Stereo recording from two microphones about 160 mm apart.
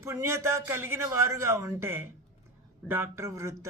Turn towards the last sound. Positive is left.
turn(degrees=-20)  # may be behind; listen again after turning